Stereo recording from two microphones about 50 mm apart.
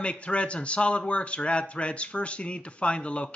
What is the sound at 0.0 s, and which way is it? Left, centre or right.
A man's voice, left.